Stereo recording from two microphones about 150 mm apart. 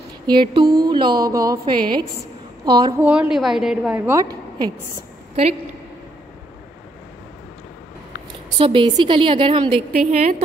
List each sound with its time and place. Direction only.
0.3 s speech: 30° right (ahead or behind)
3.0 s a woman's voice: 5° right (ahead or behind)
4.2 s a woman's voice: 25° right (ahead or behind)
8.5 s a woman's voice: 35° right (ahead or behind)
9.9 s a woman's voice: 50° right (ahead or behind)